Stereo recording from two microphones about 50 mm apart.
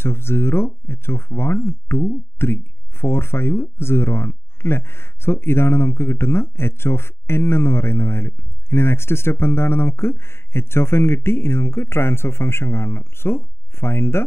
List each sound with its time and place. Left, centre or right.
0.0 s speech: left